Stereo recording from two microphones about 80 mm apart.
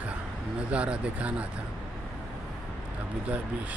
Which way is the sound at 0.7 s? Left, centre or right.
Centre.